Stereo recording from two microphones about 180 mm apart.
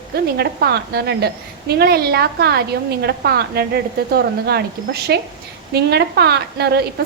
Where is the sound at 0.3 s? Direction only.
65° right (ahead or behind).